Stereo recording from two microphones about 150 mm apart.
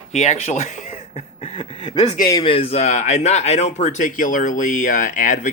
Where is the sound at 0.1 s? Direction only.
50° left (ahead or behind).